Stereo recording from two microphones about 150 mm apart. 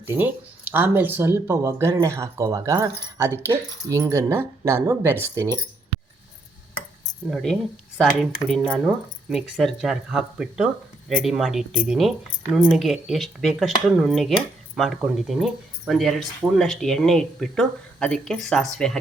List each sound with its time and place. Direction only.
0.0 s speech: 15° right (ahead or behind)
7.3 s speech: centre (ahead or behind)